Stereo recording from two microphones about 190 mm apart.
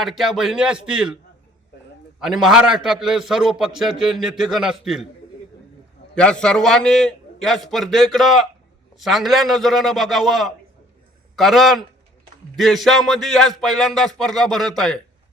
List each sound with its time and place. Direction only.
0.0 s a man's voice: centre (ahead or behind)
2.2 s a man's voice: centre (ahead or behind)
6.1 s a man's voice: 5° left (ahead or behind)